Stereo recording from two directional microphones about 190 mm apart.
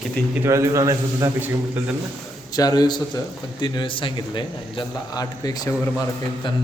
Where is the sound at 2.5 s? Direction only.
20° left (ahead or behind).